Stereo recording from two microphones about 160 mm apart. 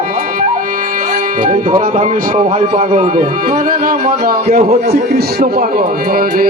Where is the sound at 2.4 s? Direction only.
40° right (ahead or behind).